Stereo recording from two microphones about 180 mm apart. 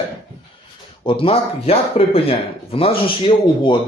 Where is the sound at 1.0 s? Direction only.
30° left (ahead or behind).